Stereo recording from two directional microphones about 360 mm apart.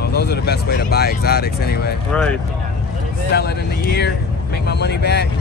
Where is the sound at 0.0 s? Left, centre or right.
Left.